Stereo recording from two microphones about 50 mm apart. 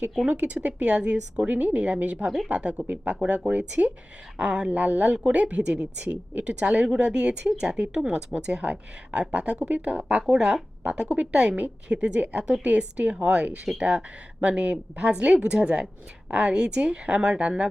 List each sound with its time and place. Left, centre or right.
0.3 s speech: right
2.1 s speech: centre
2.5 s speech: right
2.8 s speech: right
3.1 s speech: right
7.8 s speech: right
10.3 s speech: centre
10.8 s speech: right